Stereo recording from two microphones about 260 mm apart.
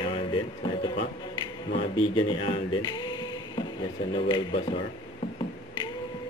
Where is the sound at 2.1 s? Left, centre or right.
Centre.